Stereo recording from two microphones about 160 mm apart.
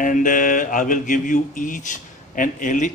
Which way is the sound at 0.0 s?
55° left (ahead or behind).